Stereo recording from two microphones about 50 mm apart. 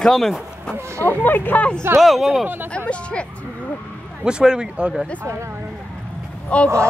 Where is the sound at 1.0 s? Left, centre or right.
Left.